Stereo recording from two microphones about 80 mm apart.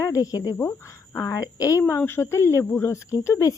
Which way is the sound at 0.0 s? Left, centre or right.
Left.